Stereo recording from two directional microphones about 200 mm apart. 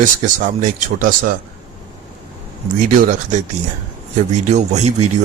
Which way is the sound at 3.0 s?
40° right (ahead or behind).